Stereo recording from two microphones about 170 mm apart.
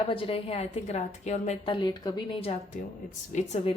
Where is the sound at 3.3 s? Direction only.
45° left (ahead or behind).